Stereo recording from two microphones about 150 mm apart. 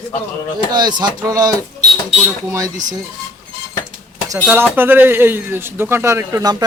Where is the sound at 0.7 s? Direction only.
30° right (ahead or behind).